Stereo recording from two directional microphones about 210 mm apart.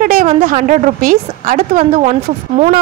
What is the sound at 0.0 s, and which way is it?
A woman's voice, 35° right (ahead or behind).